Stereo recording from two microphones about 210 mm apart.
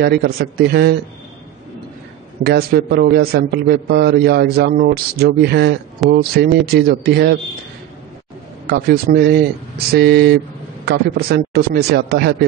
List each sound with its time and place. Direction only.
0.0 s a man's voice: 50° right (ahead or behind)
2.4 s a man's voice: 50° right (ahead or behind)
8.6 s a man's voice: 45° right (ahead or behind)